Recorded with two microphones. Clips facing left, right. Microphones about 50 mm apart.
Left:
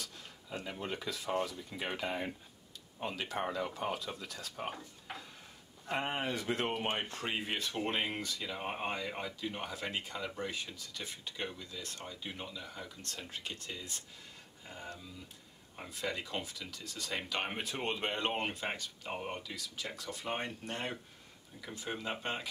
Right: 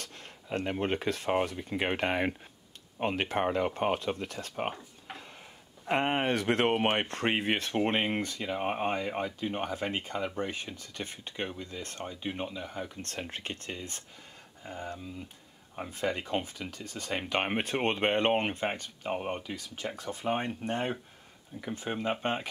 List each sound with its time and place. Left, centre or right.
0.0 s speech: right
3.0 s speech: right
5.9 s speech: right